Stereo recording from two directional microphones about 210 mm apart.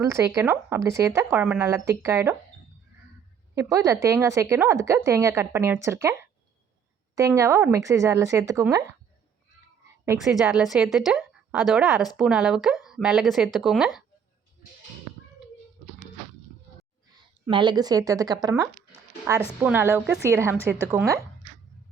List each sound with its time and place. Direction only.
0.0 s speech: 15° right (ahead or behind)
3.5 s speech: 15° right (ahead or behind)
7.2 s speech: 15° right (ahead or behind)
10.2 s a woman's voice: centre (ahead or behind)
17.4 s speech: 20° right (ahead or behind)